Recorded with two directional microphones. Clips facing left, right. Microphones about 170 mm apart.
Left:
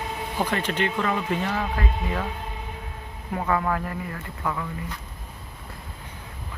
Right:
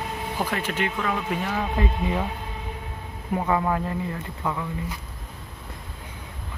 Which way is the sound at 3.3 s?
20° right (ahead or behind).